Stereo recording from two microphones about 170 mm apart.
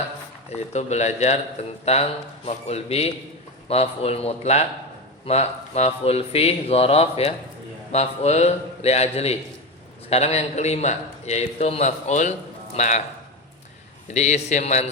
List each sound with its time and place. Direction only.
0.5 s a man's voice: 40° left (ahead or behind)
14.1 s a man's voice: 40° left (ahead or behind)